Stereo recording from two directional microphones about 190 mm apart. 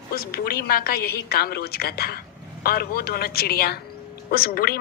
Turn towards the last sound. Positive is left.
turn(degrees=50)  # may be behind; listen again after turning